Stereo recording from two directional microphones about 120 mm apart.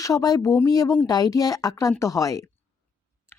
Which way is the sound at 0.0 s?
30° left (ahead or behind).